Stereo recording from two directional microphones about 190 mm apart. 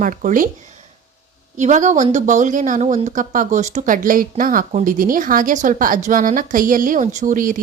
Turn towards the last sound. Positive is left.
turn(degrees=-45)  # may be behind; listen again after turning